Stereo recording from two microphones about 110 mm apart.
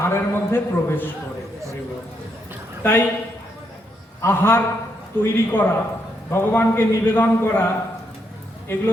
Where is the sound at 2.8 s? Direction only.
20° left (ahead or behind).